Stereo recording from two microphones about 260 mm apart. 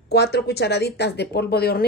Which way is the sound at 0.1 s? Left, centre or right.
Left.